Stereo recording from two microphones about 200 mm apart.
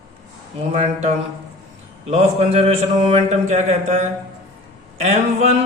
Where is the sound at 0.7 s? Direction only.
35° right (ahead or behind).